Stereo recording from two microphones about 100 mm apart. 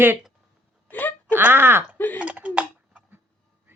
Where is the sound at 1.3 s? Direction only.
20° right (ahead or behind).